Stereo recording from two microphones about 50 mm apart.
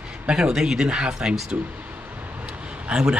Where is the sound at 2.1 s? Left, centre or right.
Right.